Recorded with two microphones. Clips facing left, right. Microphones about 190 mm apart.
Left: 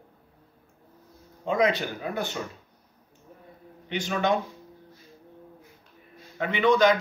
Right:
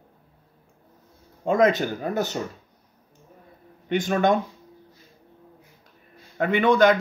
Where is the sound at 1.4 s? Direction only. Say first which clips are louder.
Right 5 dB; 45° right (ahead or behind).